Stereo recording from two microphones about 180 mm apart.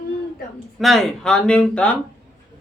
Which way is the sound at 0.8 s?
Centre (ahead or behind).